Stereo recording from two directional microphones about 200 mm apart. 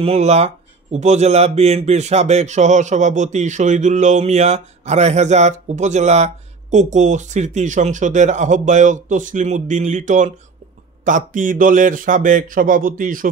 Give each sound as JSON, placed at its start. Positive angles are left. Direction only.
{"t": 0.0, "sound": "speech", "side_deg": -30}